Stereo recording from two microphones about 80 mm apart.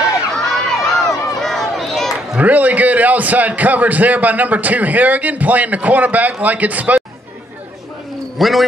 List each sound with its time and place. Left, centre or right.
0.3 s a sound: centre
2.3 s a man's voice: centre
8.4 s a man's voice: centre